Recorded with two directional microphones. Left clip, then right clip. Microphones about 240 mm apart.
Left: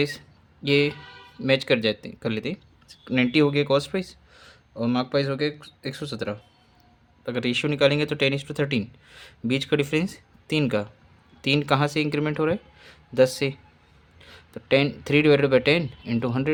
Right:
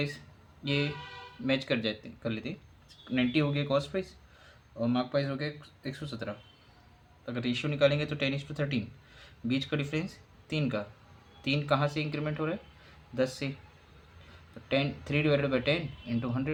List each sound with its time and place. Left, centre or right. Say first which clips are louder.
0.6 s speech: left 10 dB; left
14.7 s speech: left 10 dB; left